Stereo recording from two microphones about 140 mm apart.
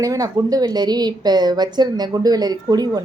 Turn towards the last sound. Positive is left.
turn(degrees=-30)  # may be behind; listen again after turning